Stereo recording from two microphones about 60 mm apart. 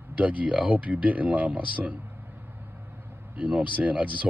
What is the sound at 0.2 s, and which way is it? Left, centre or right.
Speech, right.